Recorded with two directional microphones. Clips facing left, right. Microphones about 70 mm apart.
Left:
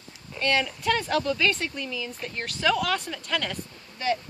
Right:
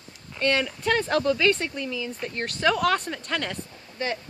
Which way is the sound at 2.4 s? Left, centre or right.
Right.